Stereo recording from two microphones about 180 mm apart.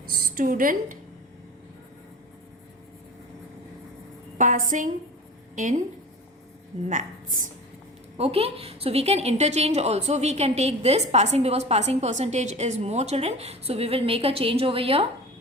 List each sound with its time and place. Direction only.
0.3 s a woman's voice: 50° right (ahead or behind)
4.4 s a woman's voice: 45° right (ahead or behind)
6.8 s a woman's voice: 45° right (ahead or behind)
8.1 s a woman's voice: 35° right (ahead or behind)